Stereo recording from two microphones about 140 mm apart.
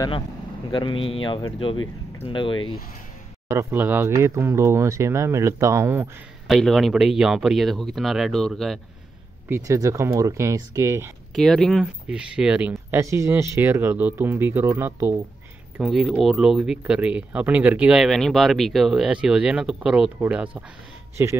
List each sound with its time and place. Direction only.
0.7 s speech: 35° left (ahead or behind)
3.4 s speech: 20° right (ahead or behind)
6.4 s speech: centre (ahead or behind)
9.5 s speech: 25° right (ahead or behind)
11.3 s speech: centre (ahead or behind); by 15.1 s 15° right (ahead or behind)
15.8 s speech: 5° right (ahead or behind)